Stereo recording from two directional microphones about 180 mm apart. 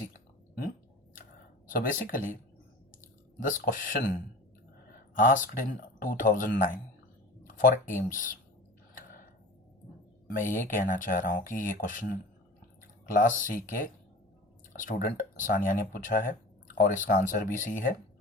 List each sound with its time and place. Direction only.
1.6 s speech: 50° left (ahead or behind)
3.4 s speech: 45° left (ahead or behind)
5.1 s speech: 50° left (ahead or behind)
10.3 s speech: 45° left (ahead or behind)
13.1 s speech: 45° left (ahead or behind)